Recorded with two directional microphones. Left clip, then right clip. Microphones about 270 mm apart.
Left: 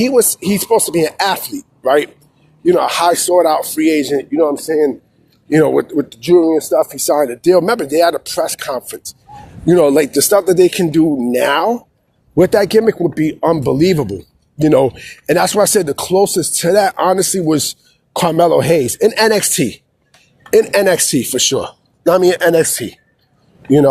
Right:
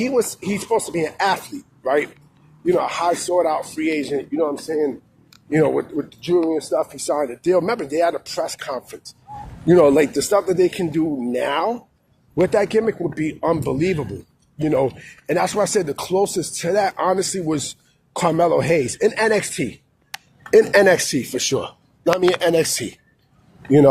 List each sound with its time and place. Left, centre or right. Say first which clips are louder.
0.0 s speech: left 7 dB; left; by 23.0 s centre